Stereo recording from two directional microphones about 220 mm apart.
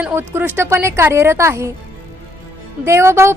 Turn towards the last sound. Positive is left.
turn(degrees=-10)  # may be behind; listen again after turning